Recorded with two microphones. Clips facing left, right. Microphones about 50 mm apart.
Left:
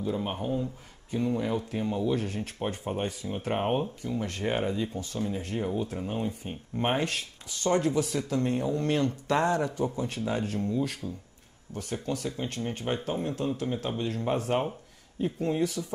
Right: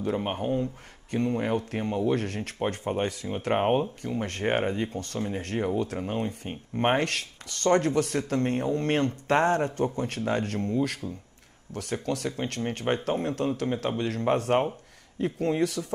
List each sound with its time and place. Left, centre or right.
0.0 s speech: right
9.9 s speech: right